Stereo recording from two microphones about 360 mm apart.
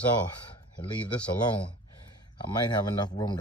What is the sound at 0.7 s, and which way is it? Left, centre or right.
Speech, centre.